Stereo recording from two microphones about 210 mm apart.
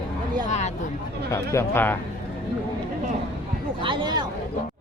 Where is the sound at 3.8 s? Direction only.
20° right (ahead or behind).